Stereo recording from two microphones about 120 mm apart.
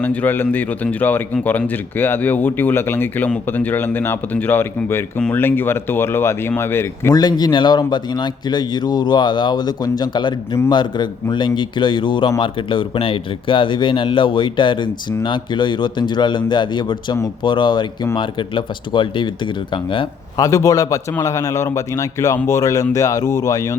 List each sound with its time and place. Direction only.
0.0 s a man's voice: 15° left (ahead or behind)
7.1 s speech: 35° left (ahead or behind)
20.3 s a man's voice: 25° left (ahead or behind)